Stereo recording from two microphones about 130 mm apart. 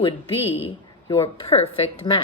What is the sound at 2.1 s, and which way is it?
Speech, 35° left (ahead or behind).